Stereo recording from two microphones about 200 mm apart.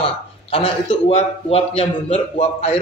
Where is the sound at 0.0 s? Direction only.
25° left (ahead or behind).